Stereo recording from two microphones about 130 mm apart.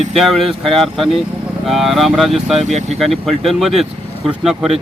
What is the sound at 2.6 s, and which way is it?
Speech, 60° right (ahead or behind).